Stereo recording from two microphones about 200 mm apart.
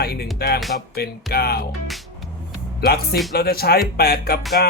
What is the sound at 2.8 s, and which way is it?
Speech, 50° left (ahead or behind).